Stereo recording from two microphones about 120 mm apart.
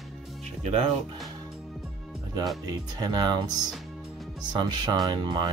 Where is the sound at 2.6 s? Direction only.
35° right (ahead or behind).